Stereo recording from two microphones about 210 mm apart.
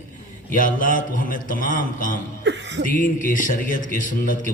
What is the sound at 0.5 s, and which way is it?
A man's voice, 40° left (ahead or behind).